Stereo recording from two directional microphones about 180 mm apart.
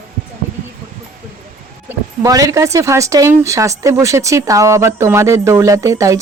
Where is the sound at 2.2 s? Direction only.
20° right (ahead or behind).